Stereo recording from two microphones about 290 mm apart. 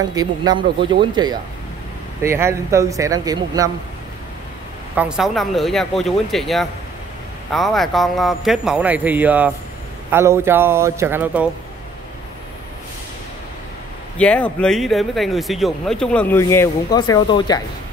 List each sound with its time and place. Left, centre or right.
0.1 s speech: centre
4.9 s speech: centre
14.1 s speech: centre